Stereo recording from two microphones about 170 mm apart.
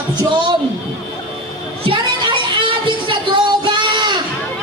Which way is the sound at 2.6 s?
30° right (ahead or behind).